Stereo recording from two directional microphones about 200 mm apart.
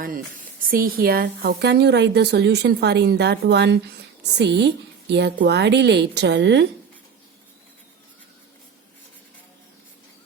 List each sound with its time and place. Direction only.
0.7 s a woman's voice: 45° right (ahead or behind)